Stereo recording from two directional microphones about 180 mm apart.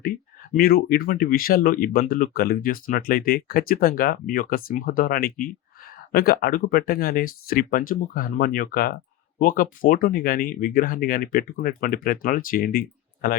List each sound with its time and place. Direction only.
0.5 s speech: 55° left (ahead or behind)